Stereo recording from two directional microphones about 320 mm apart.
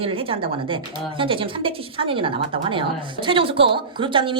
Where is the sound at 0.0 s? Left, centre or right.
Centre.